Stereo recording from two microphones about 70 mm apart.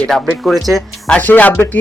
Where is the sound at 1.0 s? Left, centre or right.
Left.